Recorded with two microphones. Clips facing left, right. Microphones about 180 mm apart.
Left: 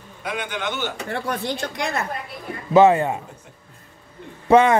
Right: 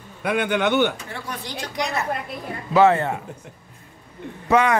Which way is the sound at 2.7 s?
15° left (ahead or behind).